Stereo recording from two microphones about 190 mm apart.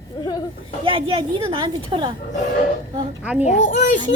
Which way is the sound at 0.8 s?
25° right (ahead or behind).